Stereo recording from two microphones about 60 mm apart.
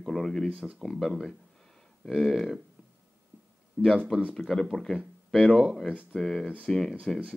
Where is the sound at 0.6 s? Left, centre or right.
Centre.